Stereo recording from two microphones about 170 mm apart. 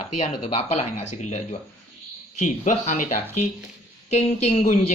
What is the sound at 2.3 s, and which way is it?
Speech, 45° left (ahead or behind).